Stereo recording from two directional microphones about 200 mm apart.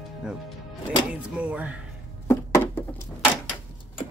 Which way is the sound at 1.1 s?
5° right (ahead or behind).